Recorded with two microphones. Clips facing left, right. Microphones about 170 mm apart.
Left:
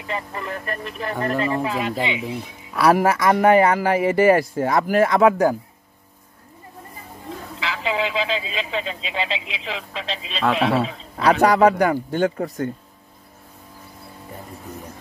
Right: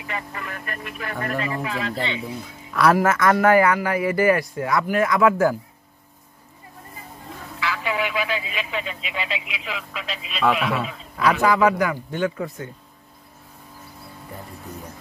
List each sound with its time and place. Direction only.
0.0 s a man's voice: 30° left (ahead or behind)
1.9 s a man's voice: 15° left (ahead or behind); by 5.3 s 30° left (ahead or behind)
7.6 s a man's voice: 25° left (ahead or behind); by 12.6 s 40° left (ahead or behind)